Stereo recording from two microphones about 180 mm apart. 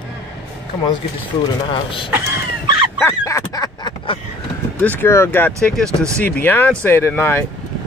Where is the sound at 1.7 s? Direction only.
30° left (ahead or behind).